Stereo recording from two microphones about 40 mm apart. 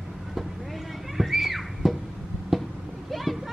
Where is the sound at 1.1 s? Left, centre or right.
Centre.